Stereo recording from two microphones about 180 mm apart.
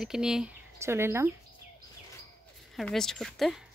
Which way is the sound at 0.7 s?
15° right (ahead or behind).